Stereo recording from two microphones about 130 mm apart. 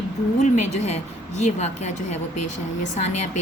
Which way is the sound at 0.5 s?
60° left (ahead or behind).